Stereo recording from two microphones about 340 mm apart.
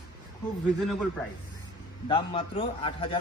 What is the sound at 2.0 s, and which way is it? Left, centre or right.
Speech, centre.